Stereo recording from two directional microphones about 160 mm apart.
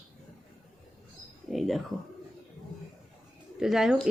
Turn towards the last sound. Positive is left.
turn(degrees=-5)  # may be behind; listen again after turning